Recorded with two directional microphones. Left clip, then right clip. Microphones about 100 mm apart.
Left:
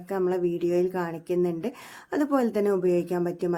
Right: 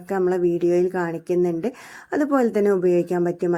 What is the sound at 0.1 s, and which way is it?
A woman's voice, 35° right (ahead or behind).